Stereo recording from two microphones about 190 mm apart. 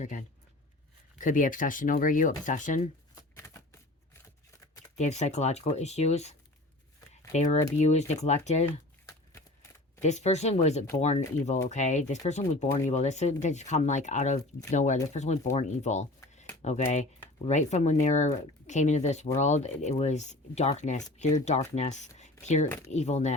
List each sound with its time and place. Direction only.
0.0 s speech: 40° left (ahead or behind)
3.2 s typewriter: 15° left (ahead or behind)
4.9 s speech: 35° left (ahead or behind)
7.3 s speech: 35° left (ahead or behind)
10.0 s speech: 35° left (ahead or behind)